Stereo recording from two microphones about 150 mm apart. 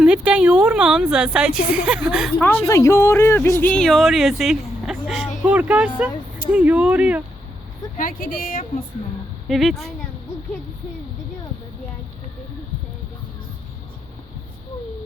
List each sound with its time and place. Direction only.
0.0 s a woman's voice: 5° right (ahead or behind)
2.4 s a woman's voice: 15° left (ahead or behind)
3.7 s a woman's voice: 5° left (ahead or behind)
7.9 s speech: 70° left (ahead or behind)
9.5 s a woman's voice: centre (ahead or behind)